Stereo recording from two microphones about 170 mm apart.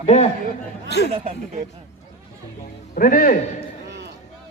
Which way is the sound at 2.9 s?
55° left (ahead or behind).